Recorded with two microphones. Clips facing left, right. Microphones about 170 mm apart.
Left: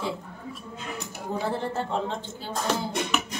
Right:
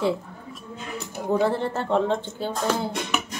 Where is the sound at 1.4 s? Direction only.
65° right (ahead or behind).